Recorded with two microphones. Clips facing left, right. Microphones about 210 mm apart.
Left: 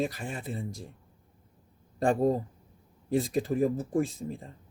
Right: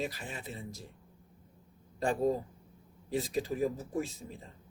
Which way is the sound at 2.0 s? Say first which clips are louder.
Left 5 dB; 50° left (ahead or behind).